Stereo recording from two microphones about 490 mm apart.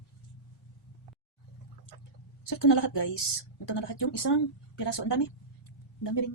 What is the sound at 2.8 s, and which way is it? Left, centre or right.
Speech, left.